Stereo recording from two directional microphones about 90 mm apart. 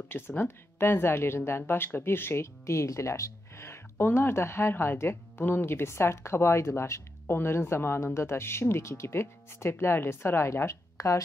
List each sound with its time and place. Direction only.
0.4 s speech: 25° left (ahead or behind)